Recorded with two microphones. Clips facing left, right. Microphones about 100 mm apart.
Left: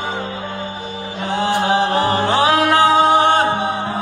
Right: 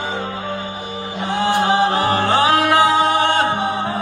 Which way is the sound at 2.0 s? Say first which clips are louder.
Even; 20° left (ahead or behind).